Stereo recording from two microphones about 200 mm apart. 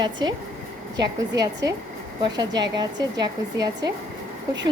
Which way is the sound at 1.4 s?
20° right (ahead or behind).